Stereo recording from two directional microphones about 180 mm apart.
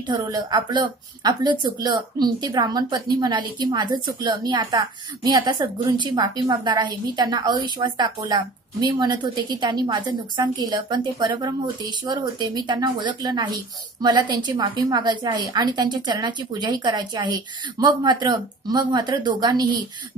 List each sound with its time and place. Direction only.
0.0 s a woman's voice: 25° right (ahead or behind)